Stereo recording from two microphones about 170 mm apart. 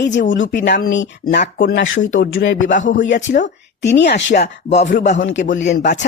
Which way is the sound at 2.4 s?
90° left.